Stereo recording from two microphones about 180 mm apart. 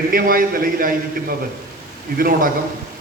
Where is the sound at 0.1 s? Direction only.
55° right (ahead or behind).